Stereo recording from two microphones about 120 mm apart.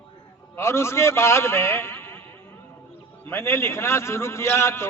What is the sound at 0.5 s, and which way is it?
A man's voice, 20° left (ahead or behind).